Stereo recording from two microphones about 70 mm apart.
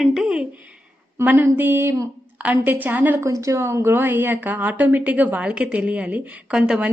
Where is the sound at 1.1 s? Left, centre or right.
Right.